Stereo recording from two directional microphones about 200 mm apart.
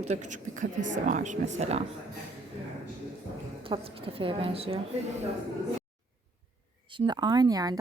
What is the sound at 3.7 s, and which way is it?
Speech, 25° right (ahead or behind).